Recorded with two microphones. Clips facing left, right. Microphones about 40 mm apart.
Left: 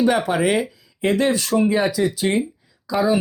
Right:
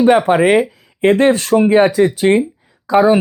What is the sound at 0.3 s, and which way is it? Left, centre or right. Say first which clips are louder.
Speech: right 8 dB; right.